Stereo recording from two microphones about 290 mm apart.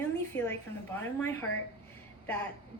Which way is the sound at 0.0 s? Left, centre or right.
Centre.